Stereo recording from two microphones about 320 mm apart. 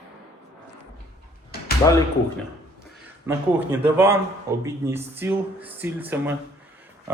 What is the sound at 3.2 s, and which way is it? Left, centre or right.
Speech, centre.